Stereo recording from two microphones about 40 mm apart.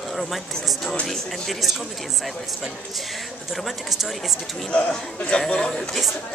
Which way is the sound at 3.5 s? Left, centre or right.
Centre.